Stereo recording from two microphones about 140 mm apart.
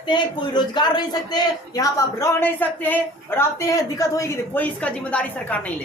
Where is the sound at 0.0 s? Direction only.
35° left (ahead or behind).